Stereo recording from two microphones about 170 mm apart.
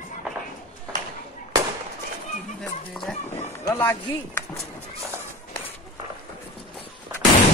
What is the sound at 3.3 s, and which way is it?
Speech, 15° left (ahead or behind).